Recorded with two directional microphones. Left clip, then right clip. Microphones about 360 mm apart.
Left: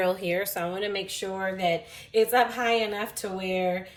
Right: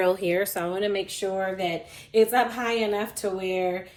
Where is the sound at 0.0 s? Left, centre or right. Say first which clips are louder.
Right 3 dB; centre.